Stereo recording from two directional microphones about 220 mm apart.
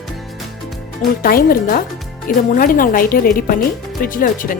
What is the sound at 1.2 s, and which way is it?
Speech, 40° left (ahead or behind).